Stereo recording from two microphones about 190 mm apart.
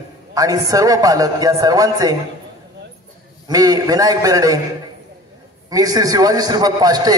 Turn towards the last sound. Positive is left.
turn(degrees=-20)  # may be behind; listen again after turning